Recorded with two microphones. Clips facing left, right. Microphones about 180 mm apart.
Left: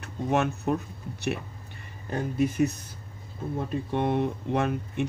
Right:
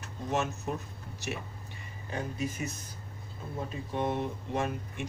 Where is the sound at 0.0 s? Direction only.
60° left (ahead or behind).